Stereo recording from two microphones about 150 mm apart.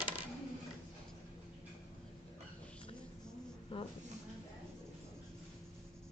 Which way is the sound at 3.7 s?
35° left (ahead or behind).